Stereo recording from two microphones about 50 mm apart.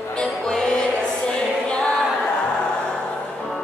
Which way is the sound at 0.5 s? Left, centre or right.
Centre.